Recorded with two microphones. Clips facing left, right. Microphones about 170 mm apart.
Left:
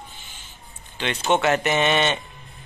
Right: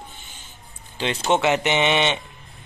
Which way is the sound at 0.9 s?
30° right (ahead or behind).